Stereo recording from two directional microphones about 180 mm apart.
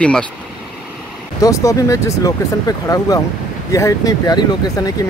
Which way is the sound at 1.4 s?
15° left (ahead or behind).